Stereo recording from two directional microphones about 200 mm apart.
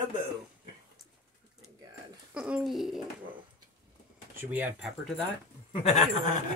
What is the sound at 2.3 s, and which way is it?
Speech, 5° right (ahead or behind).